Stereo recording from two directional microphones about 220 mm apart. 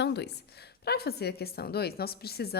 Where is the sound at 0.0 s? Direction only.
50° left (ahead or behind).